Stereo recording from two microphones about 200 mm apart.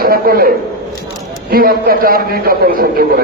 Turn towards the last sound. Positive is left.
turn(degrees=-50)  # may be behind; listen again after turning